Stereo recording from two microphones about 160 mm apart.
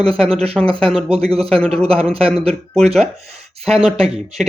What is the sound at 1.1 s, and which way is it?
Speech, 40° right (ahead or behind).